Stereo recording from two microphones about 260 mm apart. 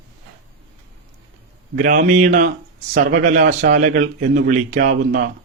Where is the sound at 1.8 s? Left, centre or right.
Right.